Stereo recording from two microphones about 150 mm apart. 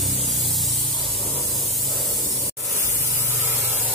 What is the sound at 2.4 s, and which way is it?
Spray, 15° right (ahead or behind).